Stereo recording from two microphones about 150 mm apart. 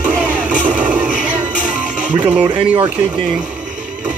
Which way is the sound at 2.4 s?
35° right (ahead or behind).